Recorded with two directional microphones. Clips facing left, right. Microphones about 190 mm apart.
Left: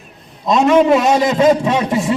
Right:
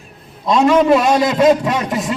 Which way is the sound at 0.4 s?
5° left (ahead or behind).